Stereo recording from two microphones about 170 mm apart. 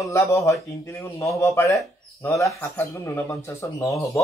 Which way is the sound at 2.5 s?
15° left (ahead or behind).